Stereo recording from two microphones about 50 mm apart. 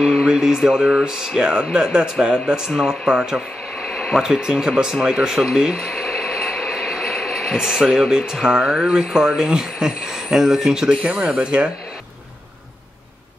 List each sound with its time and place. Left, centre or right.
0.2 s speech: centre
3.8 s a sound: centre
4.2 s speech: centre
5.9 s mechanisms: centre
6.8 s a sound: centre
7.5 s speech: centre